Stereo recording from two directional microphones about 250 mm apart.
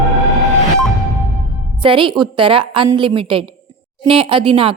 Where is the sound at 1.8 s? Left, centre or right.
Centre.